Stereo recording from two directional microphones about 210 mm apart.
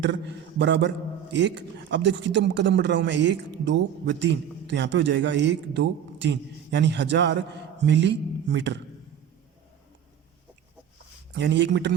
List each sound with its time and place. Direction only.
0.6 s speech: 55° right (ahead or behind)
11.3 s speech: 55° right (ahead or behind)